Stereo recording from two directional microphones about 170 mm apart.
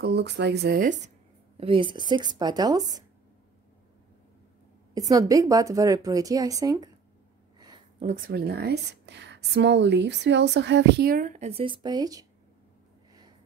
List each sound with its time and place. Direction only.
0.0 s speech: 85° right; by 1.1 s 55° right (ahead or behind)
1.6 s a woman's voice: 30° right (ahead or behind)
4.9 s a woman's voice: 20° right (ahead or behind)
7.5 s a sound: 25° right (ahead or behind)
8.3 s a woman's voice: 70° right (ahead or behind); by 12.3 s 20° right (ahead or behind)